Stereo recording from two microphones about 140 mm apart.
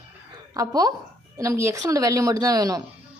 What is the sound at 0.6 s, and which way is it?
A woman's voice, 25° right (ahead or behind).